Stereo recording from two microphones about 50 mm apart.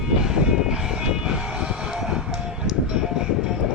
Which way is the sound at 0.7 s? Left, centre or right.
Centre.